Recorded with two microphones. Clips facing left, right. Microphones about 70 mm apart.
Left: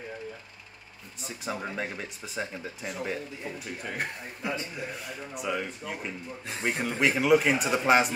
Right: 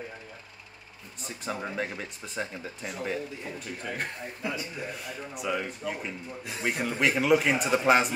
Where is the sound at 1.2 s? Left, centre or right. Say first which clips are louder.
Even; centre.